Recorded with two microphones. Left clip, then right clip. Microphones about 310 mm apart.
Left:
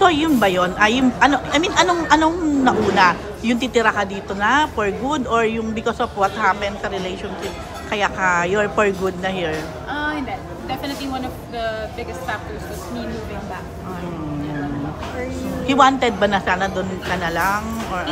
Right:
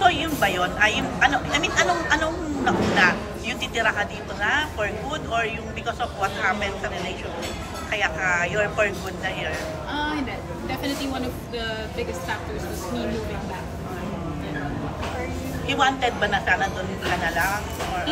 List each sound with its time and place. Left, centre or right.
0.0 s a woman's voice: centre
7.9 s a woman's voice: centre
15.6 s a woman's voice: centre